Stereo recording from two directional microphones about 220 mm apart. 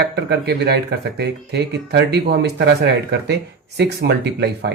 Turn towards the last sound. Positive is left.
turn(degrees=-50)  # may be behind; listen again after turning